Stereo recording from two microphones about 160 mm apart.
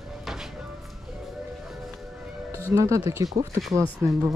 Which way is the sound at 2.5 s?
15° right (ahead or behind).